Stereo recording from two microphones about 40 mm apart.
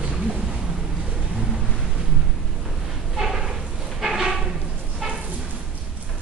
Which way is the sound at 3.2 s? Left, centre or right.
Centre.